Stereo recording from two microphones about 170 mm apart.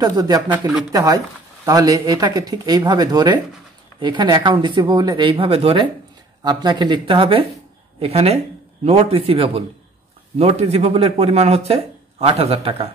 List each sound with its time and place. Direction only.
0.0 s speech: 20° right (ahead or behind)